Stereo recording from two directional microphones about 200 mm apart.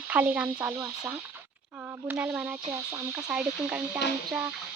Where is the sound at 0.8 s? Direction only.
20° right (ahead or behind).